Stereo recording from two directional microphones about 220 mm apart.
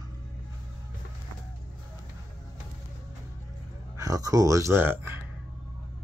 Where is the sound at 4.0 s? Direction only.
15° right (ahead or behind).